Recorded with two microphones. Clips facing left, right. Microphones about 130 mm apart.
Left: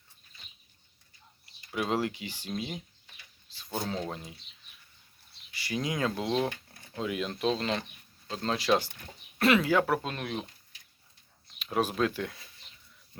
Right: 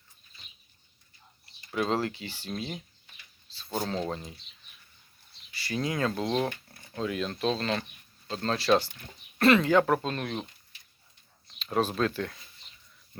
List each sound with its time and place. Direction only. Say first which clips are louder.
1.7 s speech: right 1 dB; 10° left (ahead or behind)
3.5 s a sound: right 2 dB; 15° left (ahead or behind)
4.1 s speech: right 4 dB; 5° left (ahead or behind)
5.5 s speech: right 1 dB; 15° left (ahead or behind)
11.6 s speech: right 1 dB; 10° left (ahead or behind)